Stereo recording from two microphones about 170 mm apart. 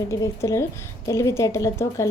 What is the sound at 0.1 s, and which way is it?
A woman's voice, 20° left (ahead or behind).